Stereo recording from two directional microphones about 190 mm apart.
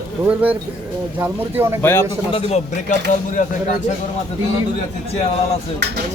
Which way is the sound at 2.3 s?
30° left (ahead or behind).